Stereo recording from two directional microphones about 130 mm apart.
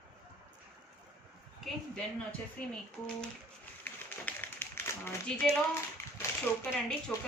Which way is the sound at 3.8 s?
15° left (ahead or behind).